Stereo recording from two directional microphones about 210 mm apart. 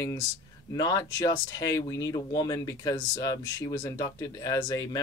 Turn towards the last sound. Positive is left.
turn(degrees=15)  # may be behind; listen again after turning